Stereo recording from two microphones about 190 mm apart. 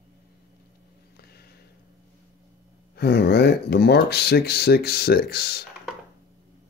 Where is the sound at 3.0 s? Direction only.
60° left (ahead or behind).